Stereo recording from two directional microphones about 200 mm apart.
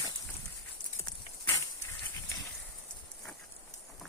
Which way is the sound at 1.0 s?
15° left (ahead or behind).